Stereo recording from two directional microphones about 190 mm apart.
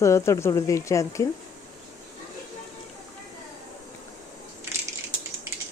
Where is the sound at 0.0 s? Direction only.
15° left (ahead or behind).